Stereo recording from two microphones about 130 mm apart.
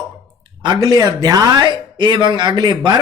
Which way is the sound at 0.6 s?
35° right (ahead or behind).